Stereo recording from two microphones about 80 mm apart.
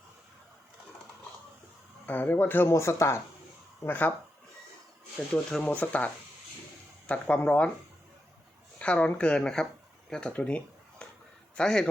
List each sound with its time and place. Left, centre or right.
2.0 s speech: left
3.8 s speech: left
5.3 s speech: centre
7.1 s speech: centre
8.8 s speech: centre
11.0 s a sound: centre
11.5 s speech: centre